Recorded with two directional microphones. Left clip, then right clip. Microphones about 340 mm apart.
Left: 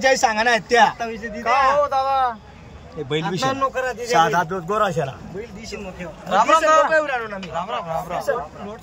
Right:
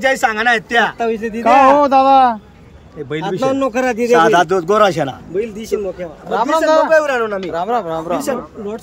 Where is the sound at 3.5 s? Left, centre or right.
Right.